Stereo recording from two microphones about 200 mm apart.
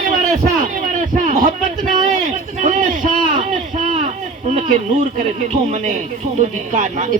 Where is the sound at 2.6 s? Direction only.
40° right (ahead or behind).